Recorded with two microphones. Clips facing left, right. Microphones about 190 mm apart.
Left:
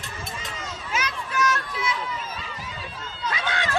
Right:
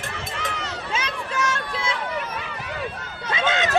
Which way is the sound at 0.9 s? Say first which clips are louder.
Left 1 dB; 30° right (ahead or behind).